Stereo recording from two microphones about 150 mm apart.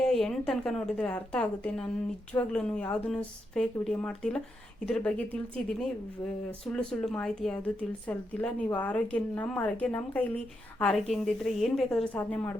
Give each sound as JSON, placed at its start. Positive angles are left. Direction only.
{"t": 0.0, "sound": "a woman's voice", "side_deg": 5}